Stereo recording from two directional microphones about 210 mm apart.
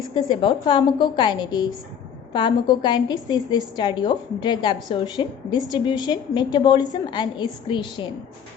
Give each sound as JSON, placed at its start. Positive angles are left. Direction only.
{"t": 0.1, "sound": "a woman's voice", "side_deg": 20}